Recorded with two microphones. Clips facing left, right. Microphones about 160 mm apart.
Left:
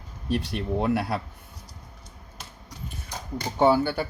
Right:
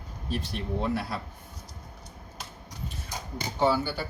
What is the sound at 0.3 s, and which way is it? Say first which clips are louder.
Speech: left 5 dB; 65° left (ahead or behind).